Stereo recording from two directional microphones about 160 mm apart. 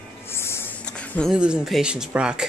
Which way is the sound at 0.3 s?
15° left (ahead or behind).